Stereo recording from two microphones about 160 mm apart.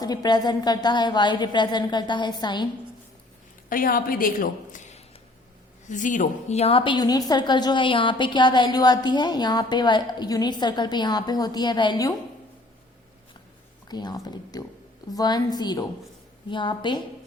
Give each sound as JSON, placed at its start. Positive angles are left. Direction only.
{"t": 0.0, "sound": "a woman's voice", "side_deg": 25}
{"t": 3.7, "sound": "a woman's voice", "side_deg": 60}
{"t": 13.8, "sound": "a woman's voice", "side_deg": 25}